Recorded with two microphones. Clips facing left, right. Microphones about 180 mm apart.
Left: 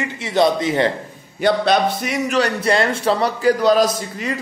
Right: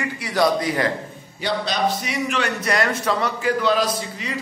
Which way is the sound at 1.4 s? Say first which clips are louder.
Left 6 dB; 55° left (ahead or behind).